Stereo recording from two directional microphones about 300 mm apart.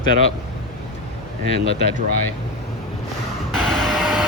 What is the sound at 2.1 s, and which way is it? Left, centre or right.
Speech, left.